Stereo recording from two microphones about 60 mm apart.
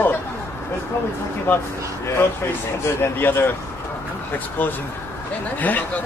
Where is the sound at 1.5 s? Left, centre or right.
Left.